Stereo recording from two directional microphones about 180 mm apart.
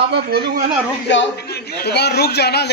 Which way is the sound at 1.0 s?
75° left (ahead or behind).